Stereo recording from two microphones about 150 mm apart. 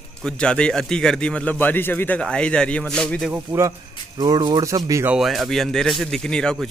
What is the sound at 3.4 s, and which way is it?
Speech, 20° right (ahead or behind).